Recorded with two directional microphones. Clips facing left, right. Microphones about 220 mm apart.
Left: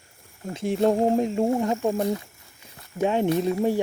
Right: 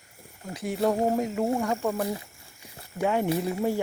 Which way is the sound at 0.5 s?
25° left (ahead or behind).